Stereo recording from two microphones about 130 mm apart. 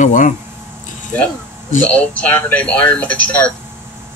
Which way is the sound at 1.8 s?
10° left (ahead or behind).